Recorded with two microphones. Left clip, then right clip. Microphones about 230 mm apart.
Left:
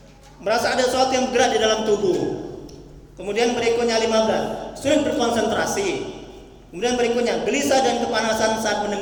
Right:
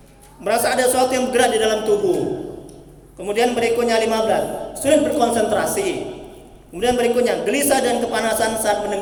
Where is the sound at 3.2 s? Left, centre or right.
Centre.